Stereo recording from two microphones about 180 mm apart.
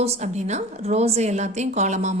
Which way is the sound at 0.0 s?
35° right (ahead or behind).